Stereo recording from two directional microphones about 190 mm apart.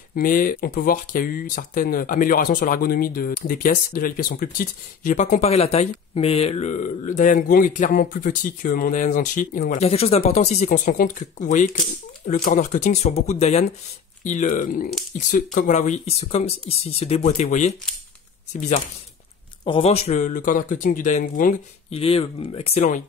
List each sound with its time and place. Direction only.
0.1 s speech: 45° left (ahead or behind)
19.6 s speech: 30° left (ahead or behind); by 21.5 s 45° left (ahead or behind)
21.9 s speech: 30° left (ahead or behind)